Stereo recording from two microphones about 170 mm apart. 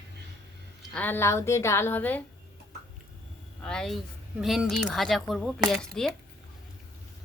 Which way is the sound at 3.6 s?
5° left (ahead or behind).